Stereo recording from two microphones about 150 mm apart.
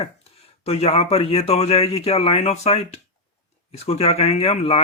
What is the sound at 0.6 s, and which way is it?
Speech, 40° left (ahead or behind).